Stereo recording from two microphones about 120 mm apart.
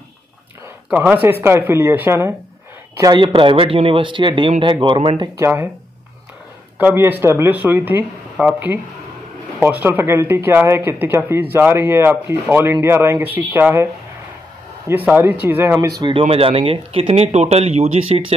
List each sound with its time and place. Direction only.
0.8 s speech: 5° right (ahead or behind)
1.1 s speech: 15° right (ahead or behind)
3.0 s speech: 40° right (ahead or behind)
5.4 s speech: 20° right (ahead or behind)
6.8 s speech: 15° right (ahead or behind)
14.9 s speech: 15° right (ahead or behind)
15.9 s speech: 45° right (ahead or behind); by 18.2 s 60° right (ahead or behind)